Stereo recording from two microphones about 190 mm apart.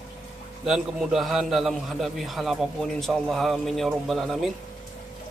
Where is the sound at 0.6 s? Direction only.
5° right (ahead or behind).